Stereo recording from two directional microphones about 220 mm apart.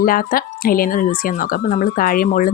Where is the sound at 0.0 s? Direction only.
40° left (ahead or behind).